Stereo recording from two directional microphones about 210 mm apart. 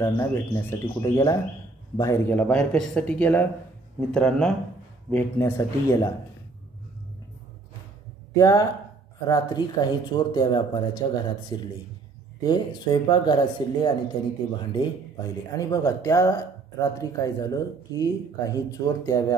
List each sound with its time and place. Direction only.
0.0 s a man's voice: 10° left (ahead or behind)
8.4 s speech: 15° left (ahead or behind)
15.5 s speech: 15° left (ahead or behind)